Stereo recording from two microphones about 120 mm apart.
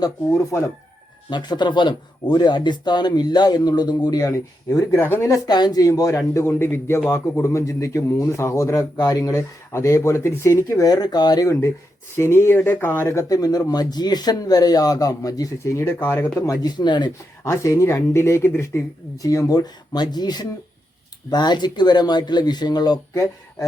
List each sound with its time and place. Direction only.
0.0 s speech: 25° left (ahead or behind)
1.3 s speech: 40° left (ahead or behind); by 5.2 s 20° left (ahead or behind)
5.2 s speech: 35° left (ahead or behind); by 16.4 s 15° left (ahead or behind)
16.5 s speech: 35° left (ahead or behind)
17.4 s speech: 25° left (ahead or behind)